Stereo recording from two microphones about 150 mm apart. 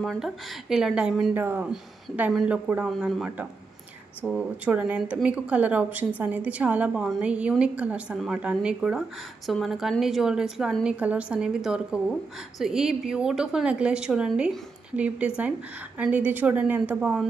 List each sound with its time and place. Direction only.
0.0 s a woman's voice: centre (ahead or behind)